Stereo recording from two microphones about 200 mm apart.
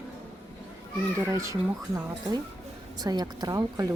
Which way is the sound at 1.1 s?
15° right (ahead or behind).